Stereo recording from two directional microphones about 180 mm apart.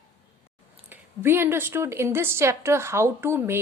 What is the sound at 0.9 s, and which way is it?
A woman's voice, 10° right (ahead or behind).